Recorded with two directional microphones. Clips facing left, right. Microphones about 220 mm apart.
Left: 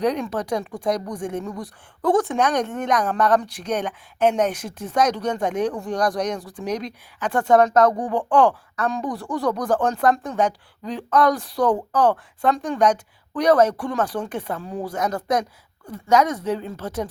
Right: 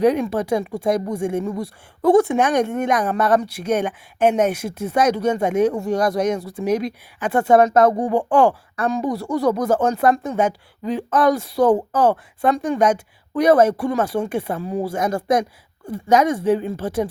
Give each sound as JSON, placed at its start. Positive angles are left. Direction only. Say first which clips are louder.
{"t": 0.0, "sound": "speech", "louder": "right 5 dB", "side_deg": -10}
{"t": 1.5, "sound": "speech", "louder": "right 6 dB", "side_deg": -25}
{"t": 2.0, "sound": "speech", "louder": "right 5 dB", "side_deg": -10}